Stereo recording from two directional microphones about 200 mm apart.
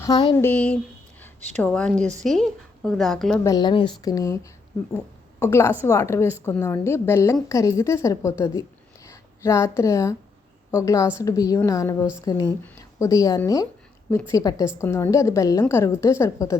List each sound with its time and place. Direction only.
0.0 s speech: 20° left (ahead or behind)
0.4 s a woman's voice: 5° left (ahead or behind)
3.4 s a woman's voice: 20° left (ahead or behind)